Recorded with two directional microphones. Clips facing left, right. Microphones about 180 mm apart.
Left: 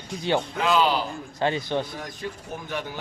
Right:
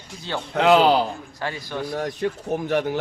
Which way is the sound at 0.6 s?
65° right (ahead or behind).